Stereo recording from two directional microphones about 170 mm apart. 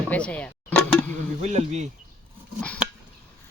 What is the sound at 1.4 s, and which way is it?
Speech, 40° right (ahead or behind).